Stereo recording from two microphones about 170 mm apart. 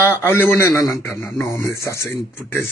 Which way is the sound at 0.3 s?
15° left (ahead or behind).